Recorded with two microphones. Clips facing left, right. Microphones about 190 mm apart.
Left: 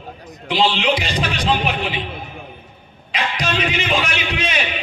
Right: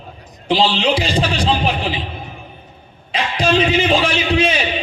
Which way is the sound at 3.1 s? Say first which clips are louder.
Right 6 dB; 30° right (ahead or behind).